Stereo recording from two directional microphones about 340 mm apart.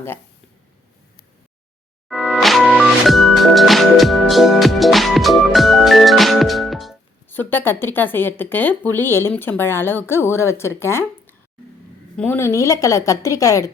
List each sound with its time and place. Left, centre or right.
2.0 s music: centre
12.1 s a woman's voice: centre